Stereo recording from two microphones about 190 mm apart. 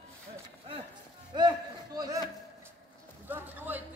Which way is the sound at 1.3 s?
20° right (ahead or behind).